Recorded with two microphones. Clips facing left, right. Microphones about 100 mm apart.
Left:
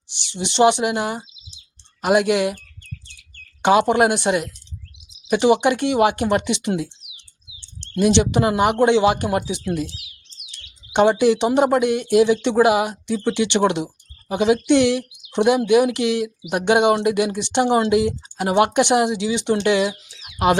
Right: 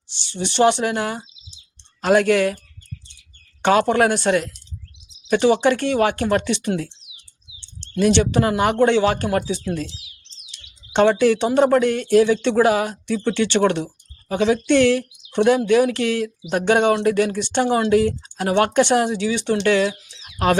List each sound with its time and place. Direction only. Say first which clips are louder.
0.1 s speech: right 1 dB; 15° left (ahead or behind)
3.6 s speech: left 1 dB; 15° left (ahead or behind)
8.0 s speech: even; 15° left (ahead or behind)
10.9 s speech: even; 15° left (ahead or behind)